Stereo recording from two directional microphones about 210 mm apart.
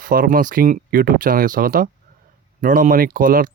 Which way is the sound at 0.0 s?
40° right (ahead or behind).